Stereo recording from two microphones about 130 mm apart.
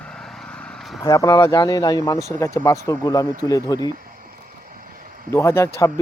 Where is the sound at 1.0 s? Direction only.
25° left (ahead or behind).